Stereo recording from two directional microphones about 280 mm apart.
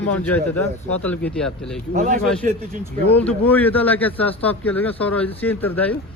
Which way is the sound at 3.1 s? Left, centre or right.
Centre.